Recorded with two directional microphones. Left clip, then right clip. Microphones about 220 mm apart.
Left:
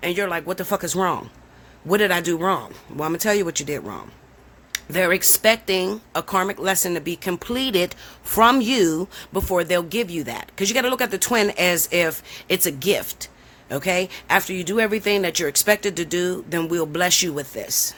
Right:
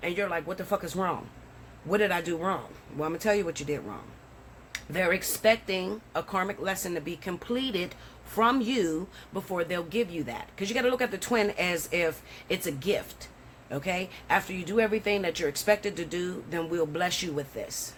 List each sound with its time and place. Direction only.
0.0 s speech: 50° left (ahead or behind)